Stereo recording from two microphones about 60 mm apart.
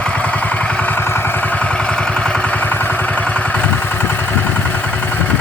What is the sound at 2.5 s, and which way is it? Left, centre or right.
Vehicle, left.